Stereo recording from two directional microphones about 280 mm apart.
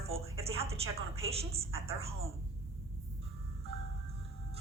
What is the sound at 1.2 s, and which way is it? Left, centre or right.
Speech, right.